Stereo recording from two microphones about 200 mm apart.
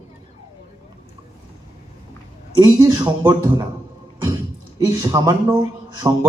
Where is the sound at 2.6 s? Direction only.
20° right (ahead or behind).